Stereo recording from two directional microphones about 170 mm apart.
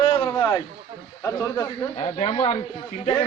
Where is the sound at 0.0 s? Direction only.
30° left (ahead or behind).